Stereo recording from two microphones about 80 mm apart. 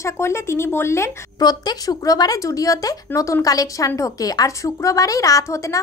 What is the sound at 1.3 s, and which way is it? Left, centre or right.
Speech, left.